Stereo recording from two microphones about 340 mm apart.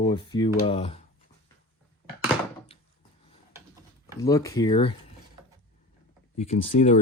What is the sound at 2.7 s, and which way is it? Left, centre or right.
Wood, centre.